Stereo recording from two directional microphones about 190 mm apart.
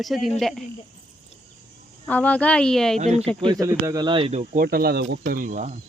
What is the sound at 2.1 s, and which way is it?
Speech, 10° left (ahead or behind).